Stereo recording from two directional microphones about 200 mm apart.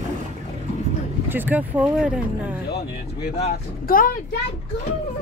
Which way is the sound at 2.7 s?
55° left (ahead or behind).